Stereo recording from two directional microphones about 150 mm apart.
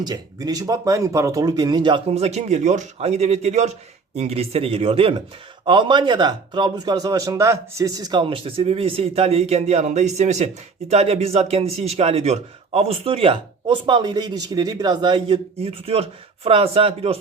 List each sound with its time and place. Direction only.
0.0 s a man's voice: 25° right (ahead or behind)